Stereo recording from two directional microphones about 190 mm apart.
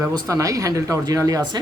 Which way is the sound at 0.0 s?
20° right (ahead or behind).